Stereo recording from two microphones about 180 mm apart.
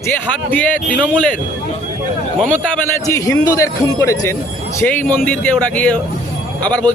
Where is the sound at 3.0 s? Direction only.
20° left (ahead or behind).